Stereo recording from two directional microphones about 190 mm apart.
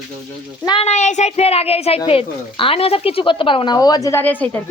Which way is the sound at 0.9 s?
40° left (ahead or behind).